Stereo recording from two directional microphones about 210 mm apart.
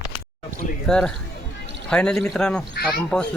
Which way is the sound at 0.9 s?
5° left (ahead or behind).